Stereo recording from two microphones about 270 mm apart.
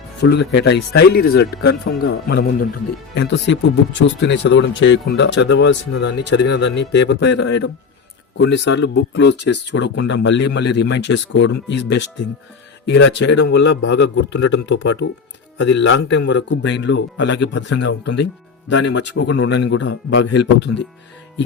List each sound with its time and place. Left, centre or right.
0.2 s speech: left